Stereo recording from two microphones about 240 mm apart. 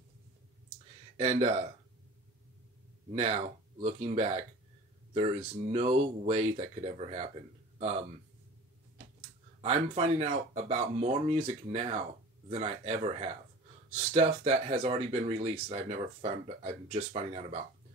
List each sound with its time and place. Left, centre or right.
1.1 s speech: right
3.1 s speech: right
9.6 s speech: right